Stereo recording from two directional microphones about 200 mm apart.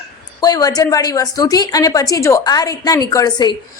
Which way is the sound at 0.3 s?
20° left (ahead or behind).